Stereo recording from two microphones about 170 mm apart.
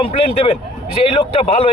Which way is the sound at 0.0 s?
35° left (ahead or behind).